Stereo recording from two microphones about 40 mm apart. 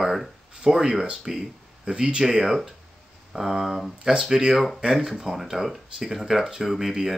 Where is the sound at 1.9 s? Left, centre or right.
Right.